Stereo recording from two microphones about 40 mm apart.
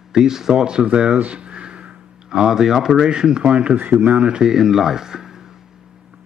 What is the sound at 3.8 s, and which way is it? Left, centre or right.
Speech, right.